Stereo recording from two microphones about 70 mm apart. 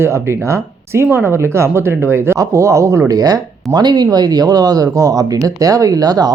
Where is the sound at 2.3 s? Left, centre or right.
Right.